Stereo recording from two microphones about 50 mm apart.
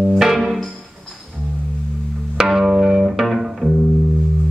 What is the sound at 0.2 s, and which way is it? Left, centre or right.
Music, centre.